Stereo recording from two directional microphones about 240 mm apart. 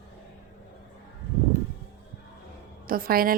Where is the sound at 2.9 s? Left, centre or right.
Right.